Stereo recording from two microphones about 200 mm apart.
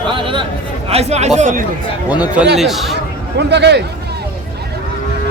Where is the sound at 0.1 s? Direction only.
25° right (ahead or behind).